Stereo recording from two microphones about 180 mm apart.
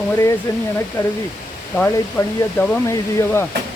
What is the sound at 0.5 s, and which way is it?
Speech, 20° left (ahead or behind).